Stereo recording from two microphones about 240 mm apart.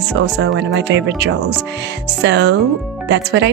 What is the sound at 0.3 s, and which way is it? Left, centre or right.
Speech, right.